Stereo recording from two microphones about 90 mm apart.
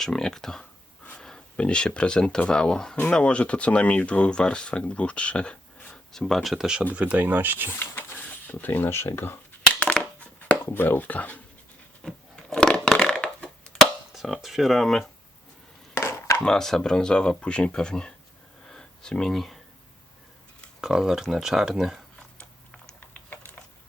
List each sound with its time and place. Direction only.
0.0 s speech: 5° left (ahead or behind)
6.9 s speech: 15° right (ahead or behind)
8.4 s speech: 20° left (ahead or behind)
9.8 s dishes: 15° left (ahead or behind)
12.0 s crushing: 5° left (ahead or behind)
14.1 s speech: 5° right (ahead or behind)
16.0 s a sound: 30° left (ahead or behind)
16.4 s speech: 5° left (ahead or behind)
18.7 s a sound: 10° left (ahead or behind)
20.8 s speech: 5° right (ahead or behind)
23.0 s a sound: 20° left (ahead or behind)